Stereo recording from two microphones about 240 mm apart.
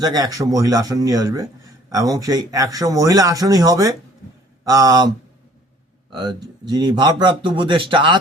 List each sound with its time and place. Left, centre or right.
0.0 s a man's voice: centre